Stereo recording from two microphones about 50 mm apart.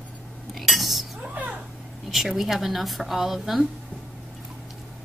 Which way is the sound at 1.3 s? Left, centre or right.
Right.